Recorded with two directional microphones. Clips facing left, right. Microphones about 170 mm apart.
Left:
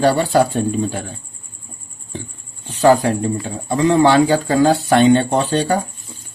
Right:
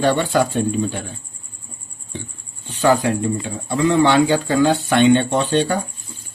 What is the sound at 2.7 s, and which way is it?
Speech, 40° left (ahead or behind).